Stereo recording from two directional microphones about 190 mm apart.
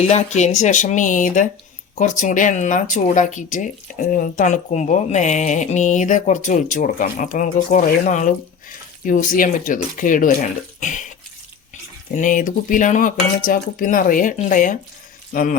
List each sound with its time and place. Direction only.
0.0 s speech: 35° left (ahead or behind)
10.8 s a sound: 40° left (ahead or behind)
12.1 s speech: 45° left (ahead or behind)